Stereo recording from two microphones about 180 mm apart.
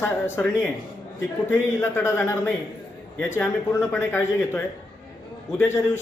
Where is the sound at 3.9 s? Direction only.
15° left (ahead or behind).